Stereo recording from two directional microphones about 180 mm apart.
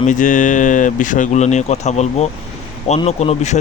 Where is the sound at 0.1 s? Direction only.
45° left (ahead or behind).